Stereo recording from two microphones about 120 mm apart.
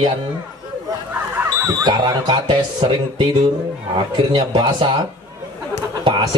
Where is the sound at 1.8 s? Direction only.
40° right (ahead or behind).